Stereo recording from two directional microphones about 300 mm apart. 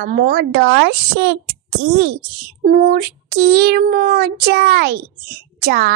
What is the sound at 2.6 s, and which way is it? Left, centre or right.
A child's voice, right.